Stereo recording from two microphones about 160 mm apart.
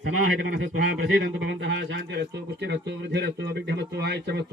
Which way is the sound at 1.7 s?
90° right.